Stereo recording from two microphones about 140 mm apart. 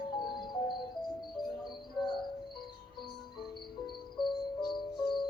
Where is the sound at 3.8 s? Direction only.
35° left (ahead or behind).